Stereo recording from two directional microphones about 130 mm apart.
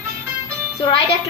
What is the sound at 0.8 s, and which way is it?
Speech, 45° left (ahead or behind).